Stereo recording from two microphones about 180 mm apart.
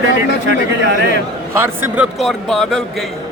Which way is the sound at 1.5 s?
15° right (ahead or behind).